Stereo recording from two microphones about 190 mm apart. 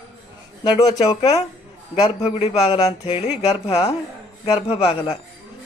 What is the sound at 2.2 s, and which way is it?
Speech, 35° left (ahead or behind).